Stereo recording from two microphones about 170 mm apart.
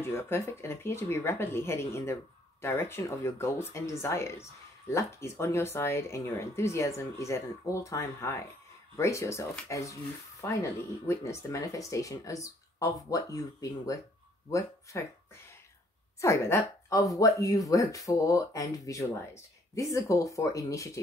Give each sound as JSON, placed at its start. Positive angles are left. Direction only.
{"t": 0.0, "sound": "speech", "side_deg": 15}
{"t": 16.2, "sound": "speech", "side_deg": 15}